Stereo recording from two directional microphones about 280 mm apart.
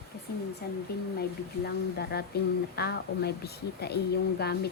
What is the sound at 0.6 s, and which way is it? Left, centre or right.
A woman's voice, left.